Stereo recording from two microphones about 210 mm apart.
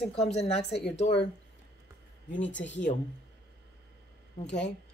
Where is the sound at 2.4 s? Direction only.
60° left (ahead or behind).